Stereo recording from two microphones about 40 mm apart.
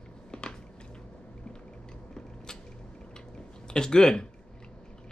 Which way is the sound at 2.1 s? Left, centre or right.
Centre.